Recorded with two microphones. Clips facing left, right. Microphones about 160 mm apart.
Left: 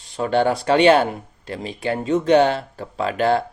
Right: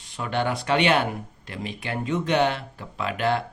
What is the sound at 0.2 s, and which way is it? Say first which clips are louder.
Speech: left 7 dB; 35° left (ahead or behind).